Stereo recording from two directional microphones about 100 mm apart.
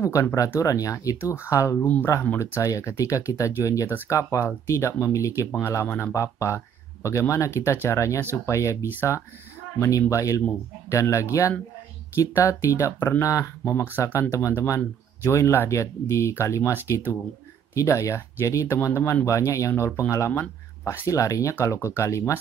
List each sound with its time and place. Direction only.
0.0 s speech: 30° left (ahead or behind)
1.2 s speech: 25° left (ahead or behind)
1.8 s speech: 15° left (ahead or behind); by 13.5 s 35° left (ahead or behind)
13.9 s speech: 20° left (ahead or behind)
17.7 s speech: 30° left (ahead or behind)